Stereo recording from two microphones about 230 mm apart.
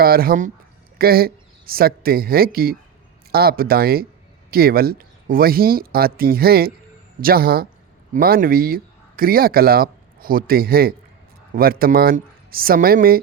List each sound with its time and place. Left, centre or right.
0.0 s speech: right